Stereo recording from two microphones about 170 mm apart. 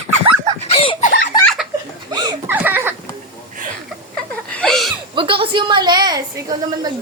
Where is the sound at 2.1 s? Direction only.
25° right (ahead or behind).